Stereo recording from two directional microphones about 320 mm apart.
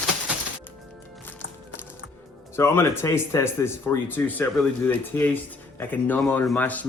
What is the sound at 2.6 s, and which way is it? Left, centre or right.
Speech, centre.